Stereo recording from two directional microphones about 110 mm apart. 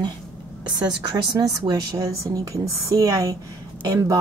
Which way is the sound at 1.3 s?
40° right (ahead or behind).